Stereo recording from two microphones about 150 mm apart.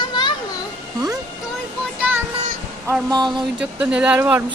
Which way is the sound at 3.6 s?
5° right (ahead or behind).